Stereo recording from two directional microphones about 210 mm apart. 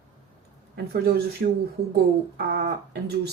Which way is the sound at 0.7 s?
50° right (ahead or behind).